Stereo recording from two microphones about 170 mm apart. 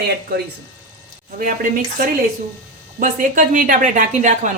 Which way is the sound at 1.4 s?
50° right (ahead or behind).